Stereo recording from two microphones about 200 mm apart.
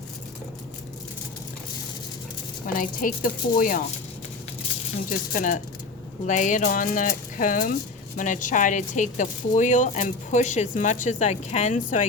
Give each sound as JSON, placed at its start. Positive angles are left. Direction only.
{"t": 2.7, "sound": "a woman's voice", "side_deg": 45}
{"t": 5.0, "sound": "speech", "side_deg": 40}